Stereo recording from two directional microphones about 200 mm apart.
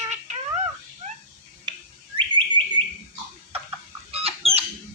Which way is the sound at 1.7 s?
25° right (ahead or behind).